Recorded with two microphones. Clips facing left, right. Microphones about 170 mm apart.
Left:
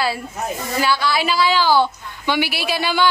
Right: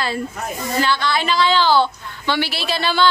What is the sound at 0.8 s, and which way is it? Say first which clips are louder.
A woman's voice: even; 10° left (ahead or behind).